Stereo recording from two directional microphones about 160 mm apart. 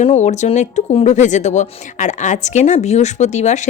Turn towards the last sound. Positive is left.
turn(degrees=45)  # may be behind; listen again after turning